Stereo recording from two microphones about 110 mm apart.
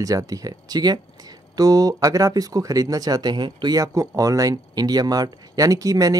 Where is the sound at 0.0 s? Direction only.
30° right (ahead or behind).